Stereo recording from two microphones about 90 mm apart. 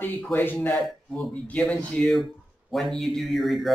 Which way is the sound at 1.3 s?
15° left (ahead or behind).